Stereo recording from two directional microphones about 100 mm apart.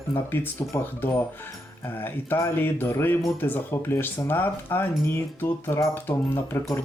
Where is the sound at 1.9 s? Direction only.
20° left (ahead or behind).